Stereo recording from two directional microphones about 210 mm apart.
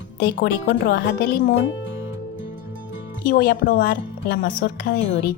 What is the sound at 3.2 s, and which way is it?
Speech, 45° left (ahead or behind).